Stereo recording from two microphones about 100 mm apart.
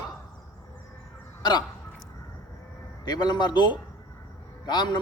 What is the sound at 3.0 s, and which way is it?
A man's voice, 45° left (ahead or behind).